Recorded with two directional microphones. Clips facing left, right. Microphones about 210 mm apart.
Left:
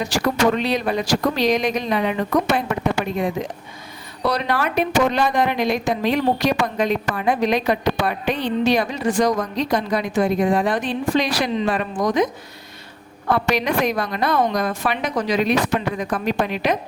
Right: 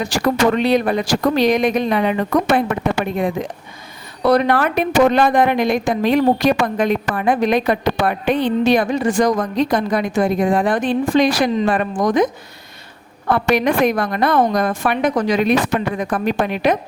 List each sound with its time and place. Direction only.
0.0 s speech: 55° right (ahead or behind)
4.3 s a woman's voice: 50° right (ahead or behind)
13.3 s a woman's voice: 55° right (ahead or behind)